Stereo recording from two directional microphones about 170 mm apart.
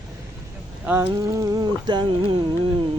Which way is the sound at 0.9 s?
10° right (ahead or behind).